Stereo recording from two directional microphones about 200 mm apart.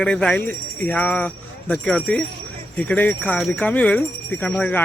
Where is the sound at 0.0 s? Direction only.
5° left (ahead or behind).